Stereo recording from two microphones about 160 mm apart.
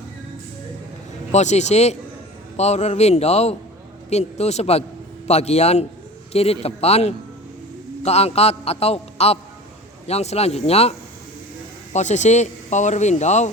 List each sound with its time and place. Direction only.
1.3 s a man's voice: 45° left (ahead or behind)
11.9 s speech: 50° left (ahead or behind)